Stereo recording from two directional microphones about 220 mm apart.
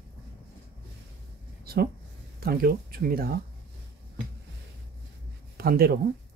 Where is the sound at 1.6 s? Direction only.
45° right (ahead or behind).